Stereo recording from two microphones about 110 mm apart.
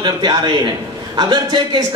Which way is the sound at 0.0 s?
40° right (ahead or behind).